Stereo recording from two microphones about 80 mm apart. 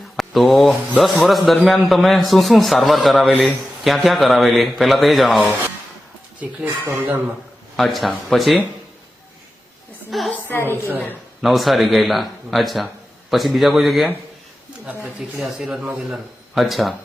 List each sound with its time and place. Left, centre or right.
0.2 s a man's voice: centre
6.4 s speech: centre
7.8 s a man's voice: centre
10.1 s a man's voice: centre
10.5 s a woman's voice: left
11.4 s a man's voice: centre